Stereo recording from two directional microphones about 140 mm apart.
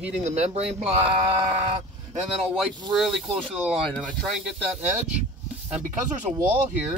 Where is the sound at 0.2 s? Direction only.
50° right (ahead or behind).